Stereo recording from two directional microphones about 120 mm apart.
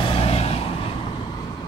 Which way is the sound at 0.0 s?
55° left (ahead or behind).